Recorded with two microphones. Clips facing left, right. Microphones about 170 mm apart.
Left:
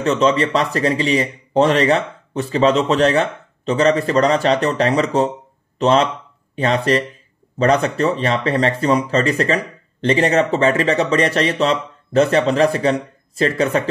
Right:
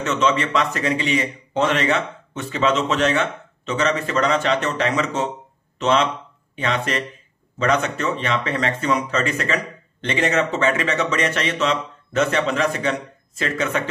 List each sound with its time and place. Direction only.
0.0 s a man's voice: 35° left (ahead or behind)